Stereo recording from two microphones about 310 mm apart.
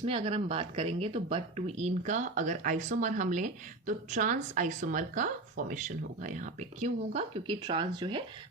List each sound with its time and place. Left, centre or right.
0.0 s speech: centre